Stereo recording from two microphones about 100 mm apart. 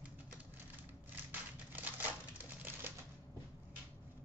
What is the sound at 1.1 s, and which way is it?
Typewriter, 20° right (ahead or behind).